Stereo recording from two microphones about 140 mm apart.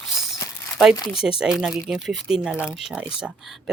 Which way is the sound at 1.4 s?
5° right (ahead or behind).